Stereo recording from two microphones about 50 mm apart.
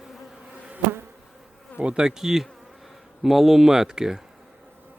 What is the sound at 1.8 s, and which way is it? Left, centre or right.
Speech, centre.